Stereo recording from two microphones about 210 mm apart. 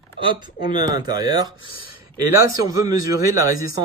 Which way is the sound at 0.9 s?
20° right (ahead or behind).